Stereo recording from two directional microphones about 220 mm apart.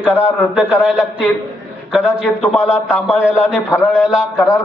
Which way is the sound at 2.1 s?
Centre (ahead or behind).